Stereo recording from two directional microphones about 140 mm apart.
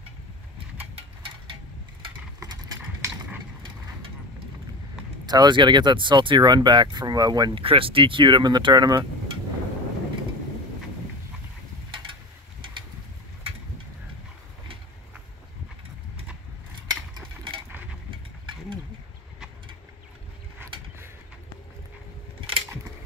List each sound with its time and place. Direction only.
0.9 s a sound: 40° right (ahead or behind)
2.4 s clip-clop: 30° right (ahead or behind)
5.2 s speech: 30° right (ahead or behind)
7.6 s speech: 40° right (ahead or behind)
16.8 s mechanisms: 30° right (ahead or behind)